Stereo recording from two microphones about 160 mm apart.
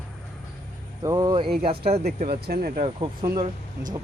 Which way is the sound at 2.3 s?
80° right.